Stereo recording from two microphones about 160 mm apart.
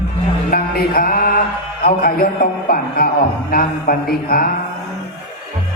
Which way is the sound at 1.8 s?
65° left (ahead or behind).